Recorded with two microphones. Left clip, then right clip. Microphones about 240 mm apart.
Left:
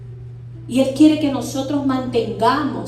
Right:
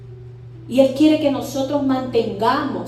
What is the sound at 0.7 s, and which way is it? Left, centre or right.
A woman's voice, left.